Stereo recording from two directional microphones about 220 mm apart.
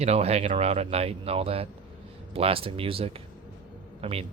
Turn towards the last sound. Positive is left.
turn(degrees=-25)  # may be behind; listen again after turning